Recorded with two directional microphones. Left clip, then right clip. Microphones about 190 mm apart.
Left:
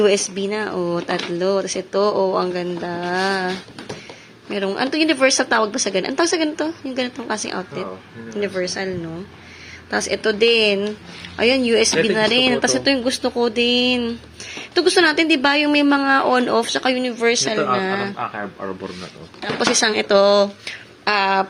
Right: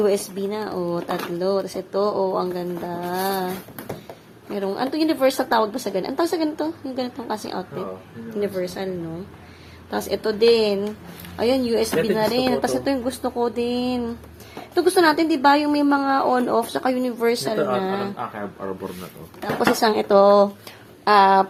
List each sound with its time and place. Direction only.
0.0 s speech: 5° left (ahead or behind)
9.9 s speech: 5° left (ahead or behind)
18.2 s speech: 25° left (ahead or behind)
19.7 s speech: 10° right (ahead or behind)